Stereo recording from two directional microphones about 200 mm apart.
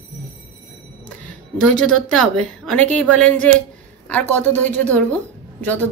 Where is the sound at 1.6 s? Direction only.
5° left (ahead or behind).